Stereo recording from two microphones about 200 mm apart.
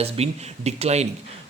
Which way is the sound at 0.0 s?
30° right (ahead or behind).